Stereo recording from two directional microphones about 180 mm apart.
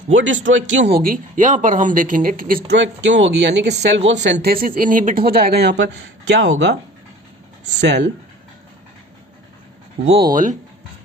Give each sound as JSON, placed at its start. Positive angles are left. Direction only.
{"t": 0.1, "sound": "speech", "side_deg": -90}
{"t": 2.7, "sound": "speech", "side_deg": -90}
{"t": 10.3, "sound": "speech", "side_deg": -45}